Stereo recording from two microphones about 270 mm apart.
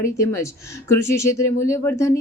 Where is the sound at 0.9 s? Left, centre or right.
Left.